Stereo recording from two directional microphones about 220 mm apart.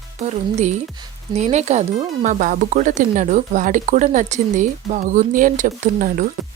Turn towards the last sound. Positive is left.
turn(degrees=-35)  # may be behind; listen again after turning